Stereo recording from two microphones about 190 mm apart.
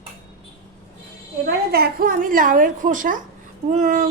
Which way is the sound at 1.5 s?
55° right (ahead or behind).